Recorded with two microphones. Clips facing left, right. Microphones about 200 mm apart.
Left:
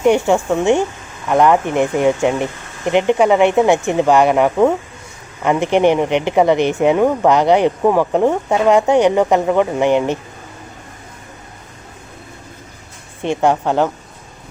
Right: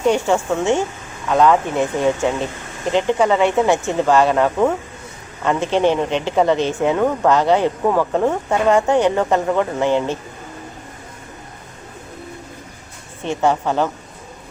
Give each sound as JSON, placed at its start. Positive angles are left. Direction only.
{"t": 0.0, "sound": "speech", "side_deg": 15}
{"t": 13.2, "sound": "speech", "side_deg": 15}